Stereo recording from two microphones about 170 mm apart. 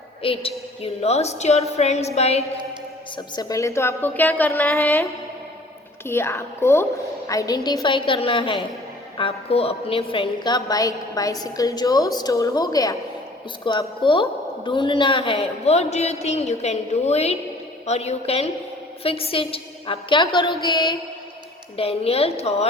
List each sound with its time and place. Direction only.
0.2 s a woman's voice: 30° left (ahead or behind)
3.2 s a woman's voice: 20° left (ahead or behind)
6.1 s a woman's voice: 15° left (ahead or behind)
21.8 s a woman's voice: 35° left (ahead or behind)